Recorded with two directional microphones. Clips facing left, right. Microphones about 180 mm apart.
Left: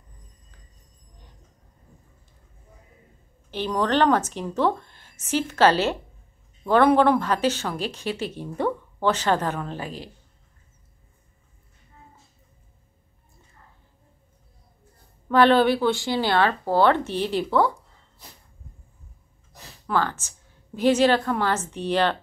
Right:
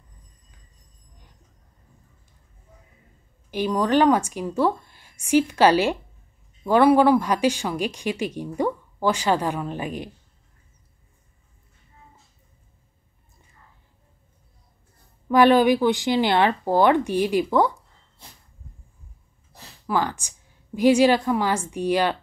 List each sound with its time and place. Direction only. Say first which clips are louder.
3.4 s speech: right 2 dB; 10° right (ahead or behind)
15.2 s speech: right 2 dB; 10° right (ahead or behind)
19.9 s speech: right 1 dB; 15° right (ahead or behind)